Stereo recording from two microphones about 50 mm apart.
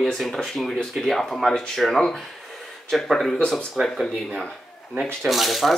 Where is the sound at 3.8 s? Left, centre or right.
Right.